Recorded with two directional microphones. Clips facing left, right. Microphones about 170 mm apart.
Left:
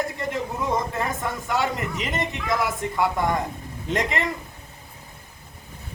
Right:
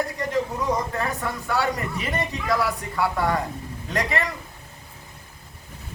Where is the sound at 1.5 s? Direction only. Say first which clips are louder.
Right 1 dB; 20° left (ahead or behind).